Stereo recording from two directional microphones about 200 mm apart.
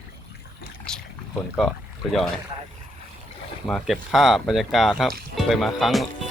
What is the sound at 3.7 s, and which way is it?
Speech, centre (ahead or behind).